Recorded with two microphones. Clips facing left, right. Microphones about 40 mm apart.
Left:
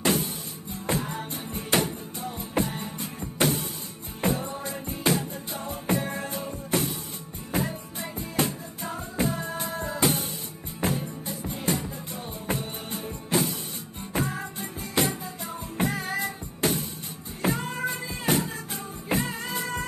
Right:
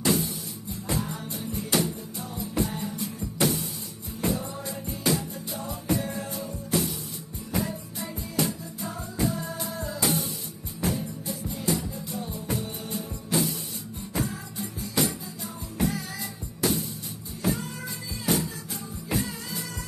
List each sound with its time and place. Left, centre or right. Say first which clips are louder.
0.0 s music: even; left